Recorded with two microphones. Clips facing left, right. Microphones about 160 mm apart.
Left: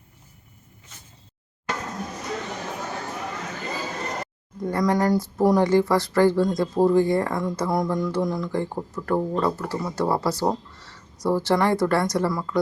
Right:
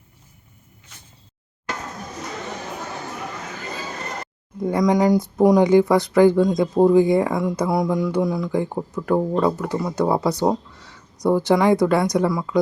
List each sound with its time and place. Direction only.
4.6 s speech: 15° right (ahead or behind)